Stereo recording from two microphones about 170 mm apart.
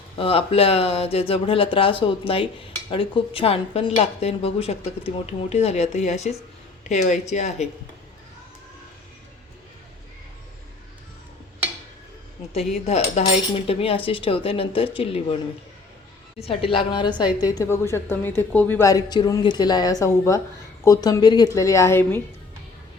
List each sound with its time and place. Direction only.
0.2 s speech: 35° left (ahead or behind)
12.5 s speech: 40° left (ahead or behind)
16.4 s a woman's voice: 35° left (ahead or behind); by 22.2 s 15° left (ahead or behind)